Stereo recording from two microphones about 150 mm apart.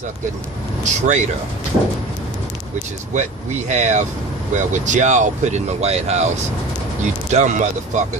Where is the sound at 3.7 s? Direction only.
50° right (ahead or behind).